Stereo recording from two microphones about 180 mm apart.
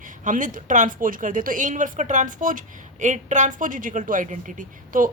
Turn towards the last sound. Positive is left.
turn(degrees=-45)  # may be behind; listen again after turning